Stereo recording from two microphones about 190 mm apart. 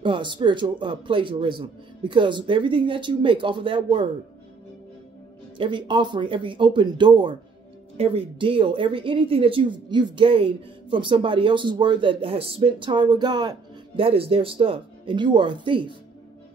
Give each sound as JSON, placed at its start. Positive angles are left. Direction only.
{"t": 0.0, "sound": "a woman's voice", "side_deg": -25}
{"t": 5.6, "sound": "a woman's voice", "side_deg": -25}